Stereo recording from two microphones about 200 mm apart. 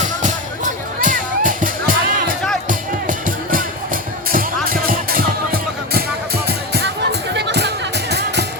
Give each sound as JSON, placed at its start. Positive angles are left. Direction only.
{"t": 0.0, "sound": "music", "side_deg": -40}